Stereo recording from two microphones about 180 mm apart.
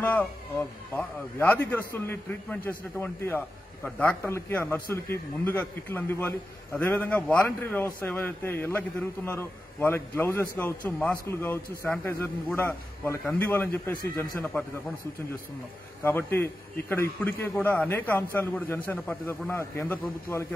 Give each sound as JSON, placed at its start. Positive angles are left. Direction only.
{"t": 0.0, "sound": "a man's voice", "side_deg": 10}
{"t": 16.0, "sound": "a man's voice", "side_deg": 10}